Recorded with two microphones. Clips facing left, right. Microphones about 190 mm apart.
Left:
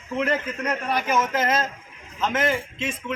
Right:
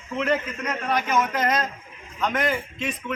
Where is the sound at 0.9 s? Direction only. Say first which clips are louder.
Right 1 dB; 10° left (ahead or behind).